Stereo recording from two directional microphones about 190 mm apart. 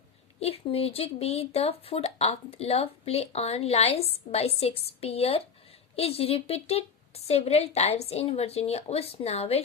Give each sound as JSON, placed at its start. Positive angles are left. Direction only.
{"t": 0.3, "sound": "speech", "side_deg": 30}